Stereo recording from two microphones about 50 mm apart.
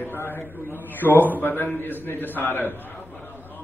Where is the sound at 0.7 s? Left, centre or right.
Left.